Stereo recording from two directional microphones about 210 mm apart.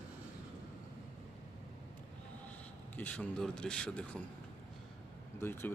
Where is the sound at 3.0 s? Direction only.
5° left (ahead or behind).